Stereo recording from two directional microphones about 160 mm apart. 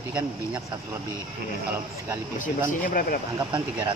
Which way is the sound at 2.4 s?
60° left (ahead or behind).